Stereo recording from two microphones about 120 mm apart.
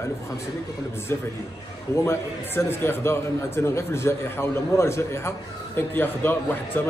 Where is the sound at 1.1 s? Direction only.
20° left (ahead or behind).